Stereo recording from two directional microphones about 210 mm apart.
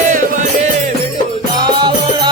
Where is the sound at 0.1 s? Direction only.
35° right (ahead or behind).